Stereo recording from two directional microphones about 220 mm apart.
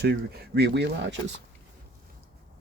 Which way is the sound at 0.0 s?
45° right (ahead or behind).